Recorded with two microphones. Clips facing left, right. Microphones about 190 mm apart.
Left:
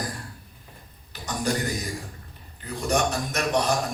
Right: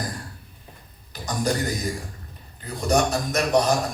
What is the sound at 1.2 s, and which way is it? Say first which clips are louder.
A man's voice: right 2 dB; 35° right (ahead or behind).